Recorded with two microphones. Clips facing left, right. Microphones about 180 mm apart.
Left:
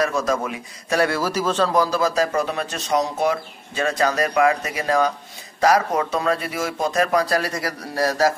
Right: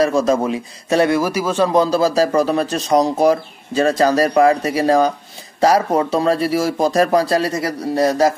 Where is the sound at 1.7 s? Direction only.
25° right (ahead or behind).